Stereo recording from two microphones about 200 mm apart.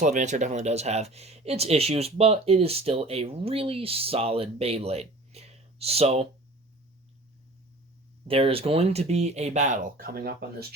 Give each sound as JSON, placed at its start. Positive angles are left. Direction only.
{"t": 0.0, "sound": "speech", "side_deg": -35}
{"t": 8.3, "sound": "speech", "side_deg": -30}